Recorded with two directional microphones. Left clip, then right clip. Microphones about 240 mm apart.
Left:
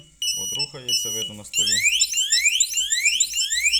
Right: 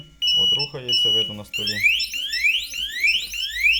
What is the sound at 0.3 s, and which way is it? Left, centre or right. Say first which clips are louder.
Speech: right 9 dB; centre.